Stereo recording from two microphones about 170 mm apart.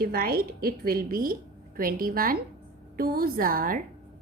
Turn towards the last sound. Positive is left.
turn(degrees=-55)  # may be behind; listen again after turning